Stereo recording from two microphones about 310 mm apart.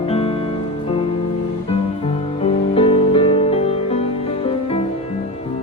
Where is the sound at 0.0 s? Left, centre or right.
Centre.